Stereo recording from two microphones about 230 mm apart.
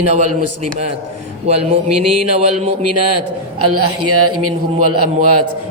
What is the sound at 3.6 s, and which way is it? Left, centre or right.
A man's voice, right.